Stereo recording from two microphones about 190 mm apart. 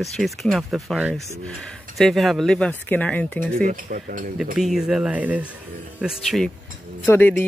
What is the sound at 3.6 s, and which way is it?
Speech, 45° right (ahead or behind).